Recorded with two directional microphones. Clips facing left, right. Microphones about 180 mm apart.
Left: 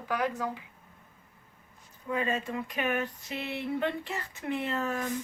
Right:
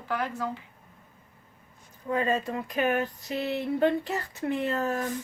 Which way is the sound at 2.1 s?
35° right (ahead or behind).